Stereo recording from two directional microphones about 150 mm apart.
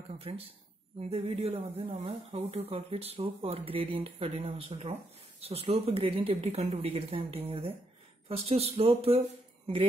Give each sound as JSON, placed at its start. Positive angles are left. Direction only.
{"t": 0.1, "sound": "speech", "side_deg": -40}